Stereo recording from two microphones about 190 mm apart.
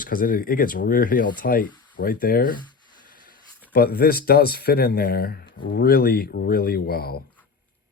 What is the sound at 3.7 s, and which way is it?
Speech, 50° left (ahead or behind).